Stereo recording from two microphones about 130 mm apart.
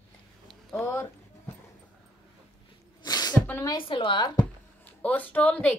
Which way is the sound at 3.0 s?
30° left (ahead or behind).